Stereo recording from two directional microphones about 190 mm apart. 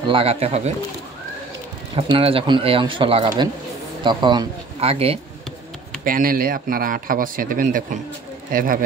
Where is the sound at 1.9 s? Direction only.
30° right (ahead or behind).